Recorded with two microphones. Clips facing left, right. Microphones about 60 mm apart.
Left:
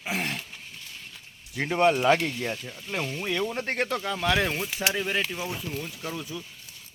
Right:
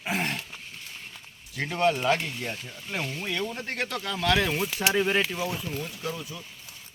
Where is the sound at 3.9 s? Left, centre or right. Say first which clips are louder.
Right 3 dB; centre.